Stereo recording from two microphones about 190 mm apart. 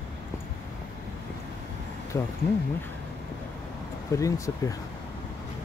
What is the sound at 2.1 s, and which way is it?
Speech, 20° left (ahead or behind).